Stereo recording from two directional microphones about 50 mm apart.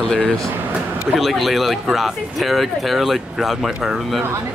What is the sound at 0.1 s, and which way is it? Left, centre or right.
Speech, centre.